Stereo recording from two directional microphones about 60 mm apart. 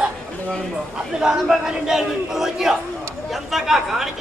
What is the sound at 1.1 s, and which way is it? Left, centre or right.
Speech, centre.